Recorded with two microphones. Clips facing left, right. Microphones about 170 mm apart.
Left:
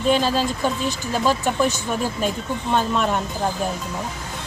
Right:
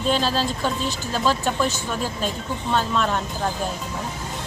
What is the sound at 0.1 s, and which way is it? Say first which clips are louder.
A woman's voice: left 3 dB; 15° left (ahead or behind).